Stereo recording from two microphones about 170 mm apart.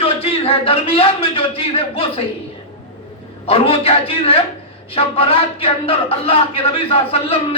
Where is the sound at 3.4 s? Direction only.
35° left (ahead or behind).